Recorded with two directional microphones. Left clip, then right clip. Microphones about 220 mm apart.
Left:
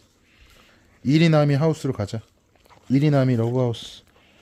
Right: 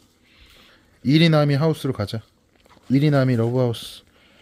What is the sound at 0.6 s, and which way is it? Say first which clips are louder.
Speech: right 2 dB; centre (ahead or behind).